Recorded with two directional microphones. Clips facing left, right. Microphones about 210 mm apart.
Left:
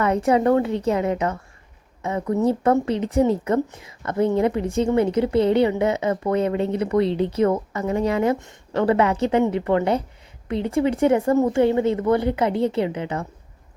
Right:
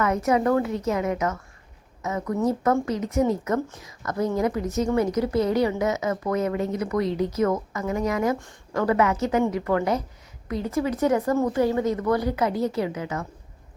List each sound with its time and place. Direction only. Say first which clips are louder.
0.0 s speech: left 3 dB; 30° left (ahead or behind)